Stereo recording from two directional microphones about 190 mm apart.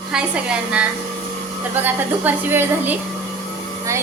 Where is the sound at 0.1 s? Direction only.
5° right (ahead or behind).